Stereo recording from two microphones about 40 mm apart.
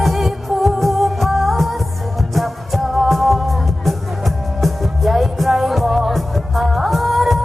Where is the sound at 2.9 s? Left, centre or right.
Centre.